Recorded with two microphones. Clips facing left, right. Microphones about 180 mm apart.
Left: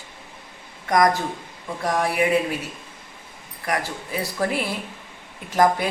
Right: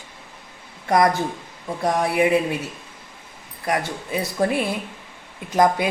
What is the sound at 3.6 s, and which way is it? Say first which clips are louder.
Speech: right 2 dB; 20° right (ahead or behind).